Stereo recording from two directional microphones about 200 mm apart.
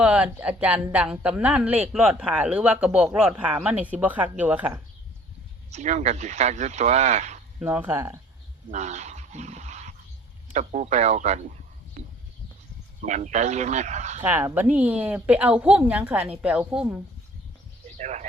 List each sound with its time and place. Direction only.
0.0 s a man's voice: 5° right (ahead or behind)
5.7 s speech: 35° right (ahead or behind)
7.6 s a woman's voice: 10° right (ahead or behind)
8.7 s dog: 35° right (ahead or behind)
10.5 s speech: 40° right (ahead or behind)
14.3 s a woman's voice: 10° right (ahead or behind)
17.8 s a sound: 35° right (ahead or behind)